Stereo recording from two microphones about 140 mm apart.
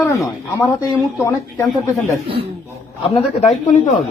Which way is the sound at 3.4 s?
55° left (ahead or behind).